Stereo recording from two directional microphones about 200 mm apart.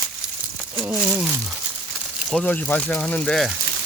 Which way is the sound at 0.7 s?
5° right (ahead or behind).